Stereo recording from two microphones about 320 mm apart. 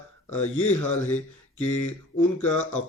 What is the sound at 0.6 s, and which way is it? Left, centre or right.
Speech, left.